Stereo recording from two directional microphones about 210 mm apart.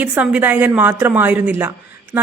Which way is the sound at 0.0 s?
10° right (ahead or behind).